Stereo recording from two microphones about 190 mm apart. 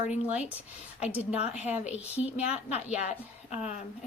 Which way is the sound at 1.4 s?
35° left (ahead or behind).